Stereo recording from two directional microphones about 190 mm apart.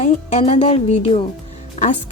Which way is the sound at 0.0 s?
35° left (ahead or behind).